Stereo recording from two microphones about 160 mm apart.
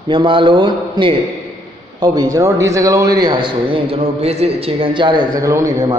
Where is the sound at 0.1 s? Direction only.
30° right (ahead or behind).